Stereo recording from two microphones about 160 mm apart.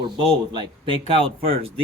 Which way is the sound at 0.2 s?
30° right (ahead or behind).